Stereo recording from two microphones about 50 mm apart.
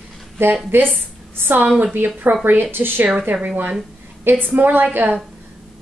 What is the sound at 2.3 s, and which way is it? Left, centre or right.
Speech, right.